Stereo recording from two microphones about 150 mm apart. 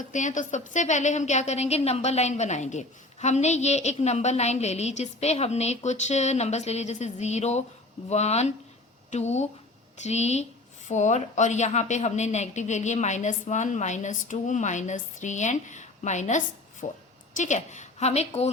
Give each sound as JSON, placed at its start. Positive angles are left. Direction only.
{"t": 0.1, "sound": "a woman's voice", "side_deg": 55}